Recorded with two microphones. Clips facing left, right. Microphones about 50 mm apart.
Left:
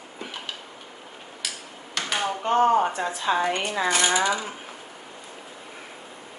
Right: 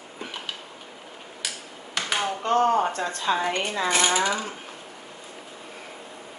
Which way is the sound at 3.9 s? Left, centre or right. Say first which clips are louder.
Even; right.